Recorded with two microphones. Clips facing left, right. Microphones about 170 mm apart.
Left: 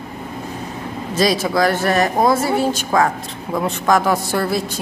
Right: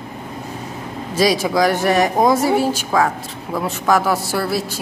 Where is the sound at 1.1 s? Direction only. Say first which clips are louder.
Right 1 dB; 10° right (ahead or behind).